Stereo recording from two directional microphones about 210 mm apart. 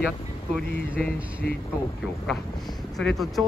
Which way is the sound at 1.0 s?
45° left (ahead or behind).